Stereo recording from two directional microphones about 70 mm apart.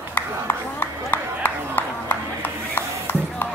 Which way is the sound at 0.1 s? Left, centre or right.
Left.